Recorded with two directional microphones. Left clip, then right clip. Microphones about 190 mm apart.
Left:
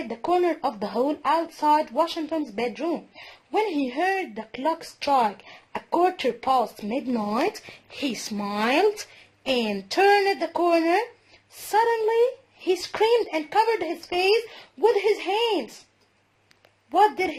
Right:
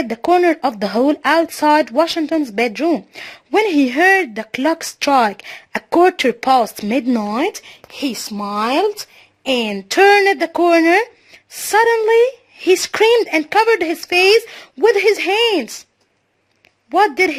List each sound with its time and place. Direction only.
0.1 s speech: 60° right (ahead or behind)
7.3 s speech: 40° right (ahead or behind)
9.9 s speech: 50° right (ahead or behind)
16.9 s speech: 50° right (ahead or behind)